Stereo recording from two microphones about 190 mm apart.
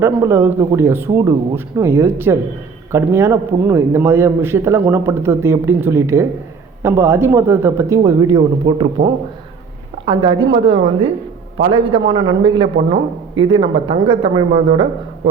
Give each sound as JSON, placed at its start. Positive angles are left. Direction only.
{"t": 0.0, "sound": "a man's voice", "side_deg": -15}
{"t": 10.1, "sound": "a man's voice", "side_deg": -25}